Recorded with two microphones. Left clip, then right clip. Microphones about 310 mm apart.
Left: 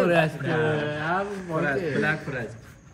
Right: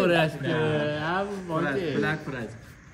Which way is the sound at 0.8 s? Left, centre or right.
Centre.